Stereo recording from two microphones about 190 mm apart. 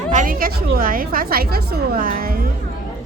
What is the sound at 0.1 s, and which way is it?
A woman's voice, 45° right (ahead or behind).